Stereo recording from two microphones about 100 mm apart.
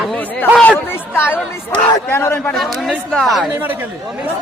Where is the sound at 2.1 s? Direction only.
25° left (ahead or behind).